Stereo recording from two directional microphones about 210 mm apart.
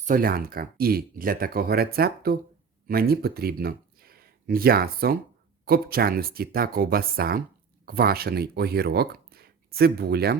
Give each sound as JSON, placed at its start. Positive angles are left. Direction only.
{"t": 0.0, "sound": "speech", "side_deg": -40}